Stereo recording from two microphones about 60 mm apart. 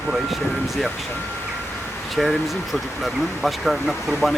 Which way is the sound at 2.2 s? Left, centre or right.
Centre.